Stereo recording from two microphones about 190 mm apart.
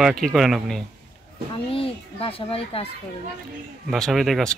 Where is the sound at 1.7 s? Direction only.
30° left (ahead or behind).